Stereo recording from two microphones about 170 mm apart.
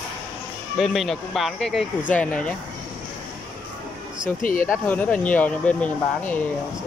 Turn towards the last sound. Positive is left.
turn(degrees=10)  # may be behind; listen again after turning